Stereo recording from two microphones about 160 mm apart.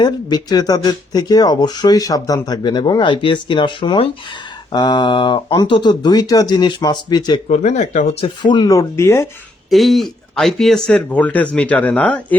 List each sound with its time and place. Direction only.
0.0 s speech: 25° left (ahead or behind)
7.4 s speech: 45° left (ahead or behind)
8.4 s speech: 30° left (ahead or behind)
9.6 s speech: centre (ahead or behind)